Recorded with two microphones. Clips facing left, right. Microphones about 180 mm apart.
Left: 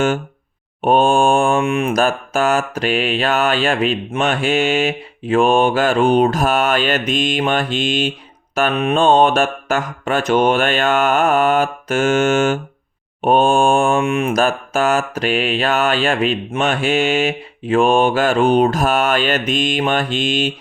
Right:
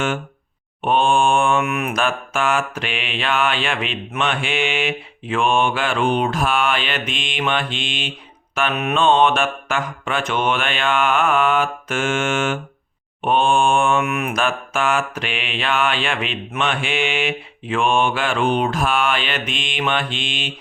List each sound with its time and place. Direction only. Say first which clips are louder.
0.8 s mantra: left 4 dB; 40° left (ahead or behind)
1.9 s mantra: left 5 dB; 40° left (ahead or behind)